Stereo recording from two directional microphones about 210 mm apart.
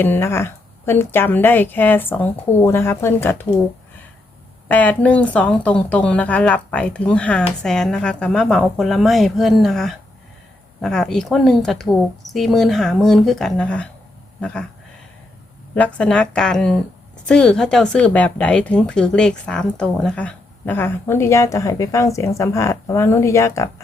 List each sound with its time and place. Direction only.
0.0 s a woman's voice: 10° left (ahead or behind)
4.7 s speech: 5° left (ahead or behind)
15.7 s a woman's voice: 5° left (ahead or behind)